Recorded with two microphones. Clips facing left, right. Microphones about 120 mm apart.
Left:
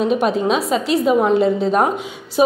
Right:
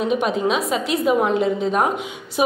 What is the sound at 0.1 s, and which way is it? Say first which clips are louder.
A woman's voice: left 3 dB; 35° left (ahead or behind).